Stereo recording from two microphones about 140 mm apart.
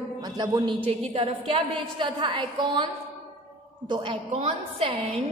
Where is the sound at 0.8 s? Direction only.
40° right (ahead or behind).